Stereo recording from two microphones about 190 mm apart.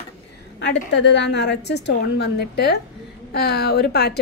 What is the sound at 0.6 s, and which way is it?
A woman's voice, 65° left (ahead or behind).